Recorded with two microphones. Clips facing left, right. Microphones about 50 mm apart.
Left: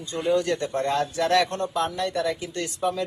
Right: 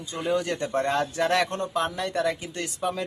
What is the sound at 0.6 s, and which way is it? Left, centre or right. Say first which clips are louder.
A man's voice: even; right.